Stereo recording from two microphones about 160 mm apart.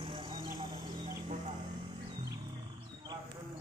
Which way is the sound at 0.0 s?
30° right (ahead or behind).